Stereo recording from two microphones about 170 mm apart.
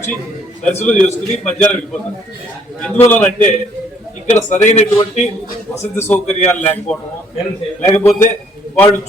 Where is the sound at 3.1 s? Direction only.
10° left (ahead or behind).